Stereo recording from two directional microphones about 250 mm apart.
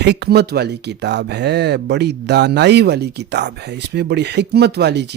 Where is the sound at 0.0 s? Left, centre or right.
Right.